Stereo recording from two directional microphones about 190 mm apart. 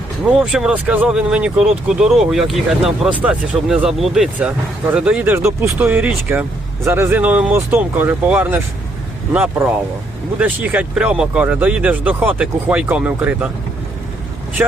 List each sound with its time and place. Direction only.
0.3 s speech: 5° right (ahead or behind)